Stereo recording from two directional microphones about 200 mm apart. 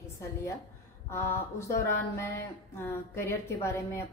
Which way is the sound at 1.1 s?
15° left (ahead or behind).